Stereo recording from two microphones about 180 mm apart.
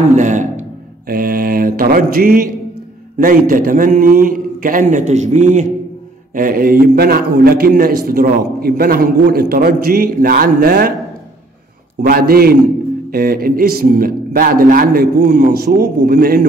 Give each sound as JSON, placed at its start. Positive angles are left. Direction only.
{"t": 0.1, "sound": "a man's voice", "side_deg": -45}
{"t": 12.0, "sound": "a man's voice", "side_deg": -55}